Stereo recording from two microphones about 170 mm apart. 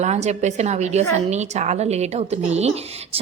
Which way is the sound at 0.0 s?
40° right (ahead or behind).